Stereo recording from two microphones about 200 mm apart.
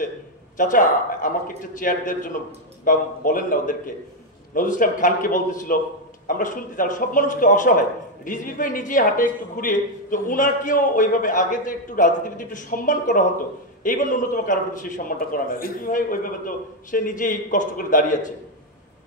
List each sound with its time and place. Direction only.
0.6 s a woman's voice: 40° left (ahead or behind)